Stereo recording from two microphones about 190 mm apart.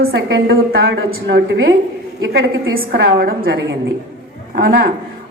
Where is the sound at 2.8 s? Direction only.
55° right (ahead or behind).